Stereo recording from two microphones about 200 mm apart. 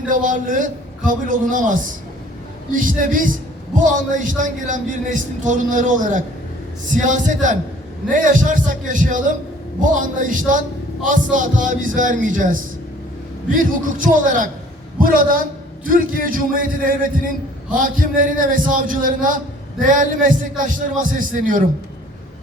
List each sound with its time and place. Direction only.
0.1 s a man's voice: 40° right (ahead or behind)